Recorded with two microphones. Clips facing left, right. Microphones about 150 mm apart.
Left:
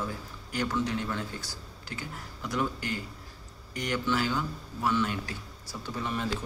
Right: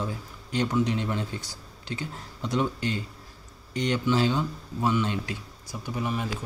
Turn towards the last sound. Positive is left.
turn(degrees=-10)  # may be behind; listen again after turning